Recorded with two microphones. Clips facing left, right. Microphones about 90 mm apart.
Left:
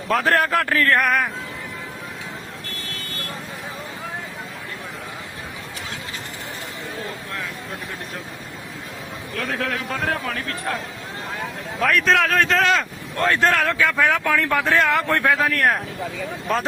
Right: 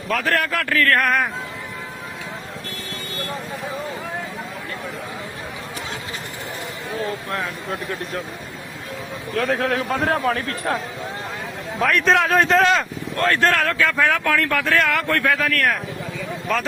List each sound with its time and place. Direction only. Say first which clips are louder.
0.1 s a man's voice: left 3 dB; 35° left (ahead or behind)
0.9 s speech: even; 10° left (ahead or behind)
9.6 s a man's voice: right 4 dB; 40° right (ahead or behind)
11.8 s speech: right 1 dB; centre (ahead or behind)
13.2 s speech: even; 15° left (ahead or behind)